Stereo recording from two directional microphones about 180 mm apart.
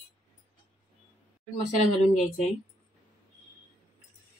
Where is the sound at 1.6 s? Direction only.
40° left (ahead or behind).